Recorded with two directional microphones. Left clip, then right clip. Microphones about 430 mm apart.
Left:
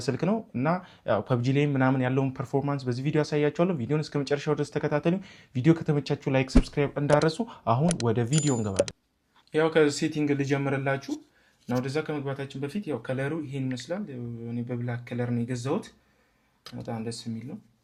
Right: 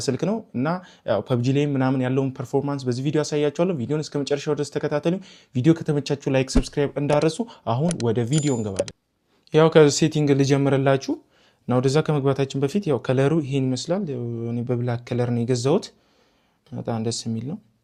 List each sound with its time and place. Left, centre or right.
0.0 s speech: centre
8.3 s speech: centre
9.5 s speech: right
11.7 s speech: right
16.8 s speech: right